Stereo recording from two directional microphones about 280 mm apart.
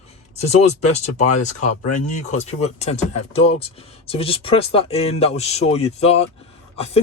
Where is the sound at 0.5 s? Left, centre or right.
Left.